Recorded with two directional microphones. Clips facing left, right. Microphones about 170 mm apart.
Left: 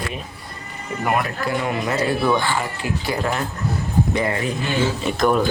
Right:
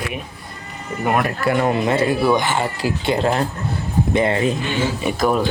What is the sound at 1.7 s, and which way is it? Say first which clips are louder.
Speech: right 4 dB; 25° right (ahead or behind).